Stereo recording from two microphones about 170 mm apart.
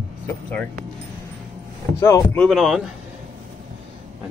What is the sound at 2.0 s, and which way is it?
Speech, 15° left (ahead or behind).